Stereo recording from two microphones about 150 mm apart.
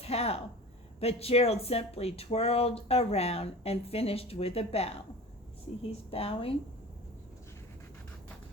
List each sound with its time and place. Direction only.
0.0 s a woman's voice: 45° left (ahead or behind)
6.1 s speech: 40° left (ahead or behind)